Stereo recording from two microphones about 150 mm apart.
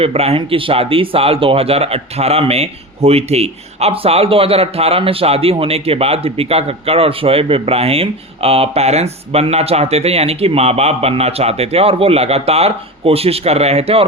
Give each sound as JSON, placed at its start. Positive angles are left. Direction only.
{"t": 0.0, "sound": "speech", "side_deg": -45}